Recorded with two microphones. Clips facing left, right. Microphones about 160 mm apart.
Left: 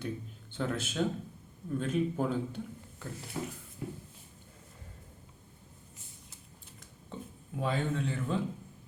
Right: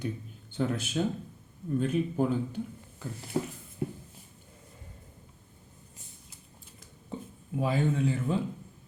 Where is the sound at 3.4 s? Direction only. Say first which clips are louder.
Right 7 dB; 40° right (ahead or behind).